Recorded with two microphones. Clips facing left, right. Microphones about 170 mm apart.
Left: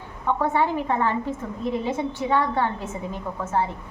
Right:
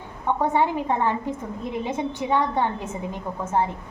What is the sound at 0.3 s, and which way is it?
A woman's voice, 20° right (ahead or behind).